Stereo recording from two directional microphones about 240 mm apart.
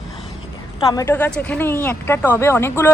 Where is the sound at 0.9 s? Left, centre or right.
Centre.